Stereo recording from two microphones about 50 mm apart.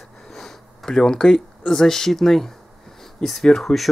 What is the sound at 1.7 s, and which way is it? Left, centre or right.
Speech, centre.